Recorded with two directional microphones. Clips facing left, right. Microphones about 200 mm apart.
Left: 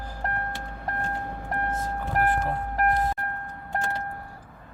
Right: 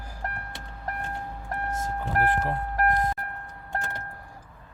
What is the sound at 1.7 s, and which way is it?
Vehicle, 45° right (ahead or behind).